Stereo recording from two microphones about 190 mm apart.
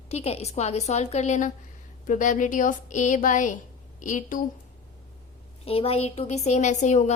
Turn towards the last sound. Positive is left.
turn(degrees=40)  # may be behind; listen again after turning